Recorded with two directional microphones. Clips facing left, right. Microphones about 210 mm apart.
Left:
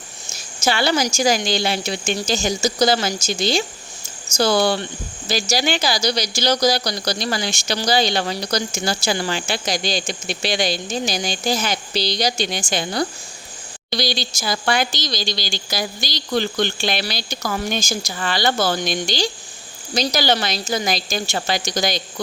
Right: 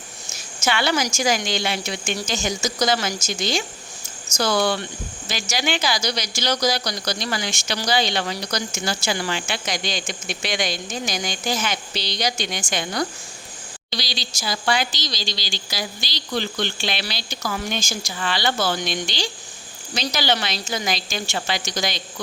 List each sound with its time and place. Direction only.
0.6 s speech: 35° left (ahead or behind)
13.9 s speech: 50° left (ahead or behind)